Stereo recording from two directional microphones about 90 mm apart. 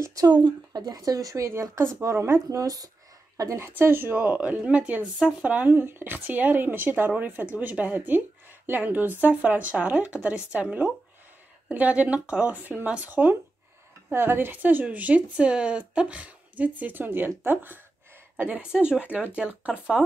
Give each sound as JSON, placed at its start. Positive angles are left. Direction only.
{"t": 0.0, "sound": "speech", "side_deg": -40}
{"t": 2.6, "sound": "speech", "side_deg": -40}
{"t": 3.3, "sound": "a woman's voice", "side_deg": -30}